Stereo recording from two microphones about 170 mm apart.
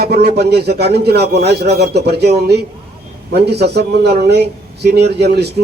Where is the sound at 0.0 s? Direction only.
70° right (ahead or behind).